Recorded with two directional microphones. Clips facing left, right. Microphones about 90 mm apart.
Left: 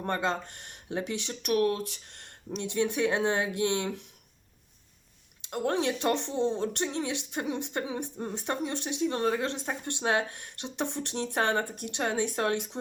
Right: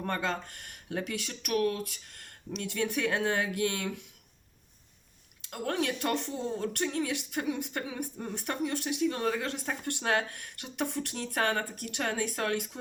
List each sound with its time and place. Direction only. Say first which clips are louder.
0.0 s speech: left 3 dB; 25° left (ahead or behind)
5.4 s speech: left 3 dB; 25° left (ahead or behind)